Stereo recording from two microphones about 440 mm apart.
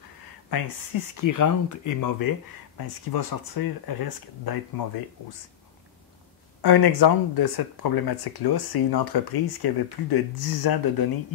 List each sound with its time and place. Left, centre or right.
0.5 s speech: left
6.6 s speech: left